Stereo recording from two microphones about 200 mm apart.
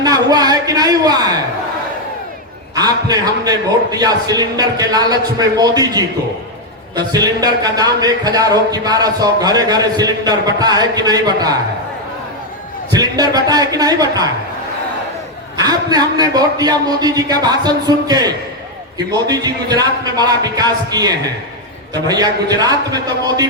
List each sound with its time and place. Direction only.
0.0 s a man's voice: 20° right (ahead or behind)
2.7 s a man's voice: 20° right (ahead or behind)
13.0 s a man's voice: 20° right (ahead or behind)
15.5 s a man's voice: 20° right (ahead or behind)